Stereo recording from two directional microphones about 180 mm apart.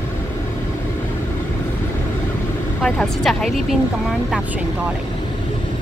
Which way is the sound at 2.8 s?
Centre (ahead or behind).